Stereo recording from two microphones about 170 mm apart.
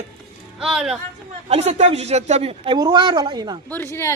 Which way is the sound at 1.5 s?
40° right (ahead or behind).